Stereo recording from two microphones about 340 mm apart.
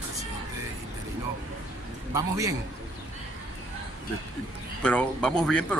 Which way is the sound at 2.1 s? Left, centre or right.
Centre.